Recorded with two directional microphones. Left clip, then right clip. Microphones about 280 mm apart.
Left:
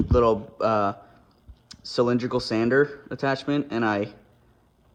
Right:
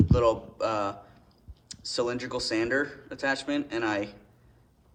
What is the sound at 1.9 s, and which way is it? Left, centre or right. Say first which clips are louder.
Speech: left 7 dB; left.